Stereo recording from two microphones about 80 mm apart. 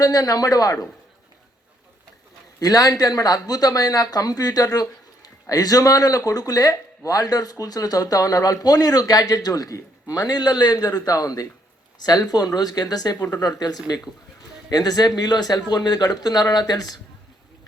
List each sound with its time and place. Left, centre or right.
0.0 s speech: left
2.6 s speech: left